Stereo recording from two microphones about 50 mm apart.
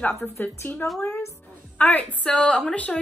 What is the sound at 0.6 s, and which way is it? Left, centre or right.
A woman's voice, left.